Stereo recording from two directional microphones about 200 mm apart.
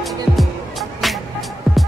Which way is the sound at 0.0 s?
Centre (ahead or behind).